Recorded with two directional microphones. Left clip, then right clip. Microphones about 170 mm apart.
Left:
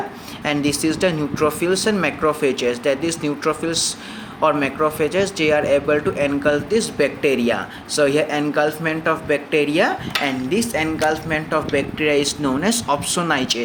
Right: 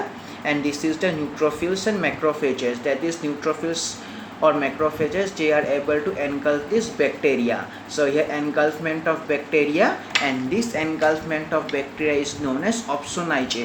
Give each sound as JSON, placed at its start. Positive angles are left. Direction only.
{"t": 0.4, "sound": "speech", "side_deg": 60}